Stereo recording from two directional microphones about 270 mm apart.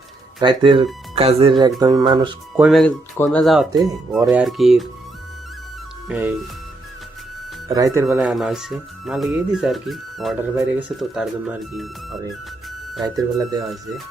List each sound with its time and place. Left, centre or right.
0.3 s speech: centre
2.6 s speech: centre
6.1 s speech: centre
7.9 s speech: centre
13.0 s speech: centre